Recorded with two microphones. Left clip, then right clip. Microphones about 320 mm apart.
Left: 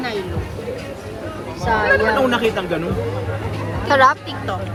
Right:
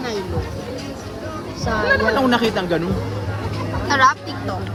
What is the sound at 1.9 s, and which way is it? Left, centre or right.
Speech, right.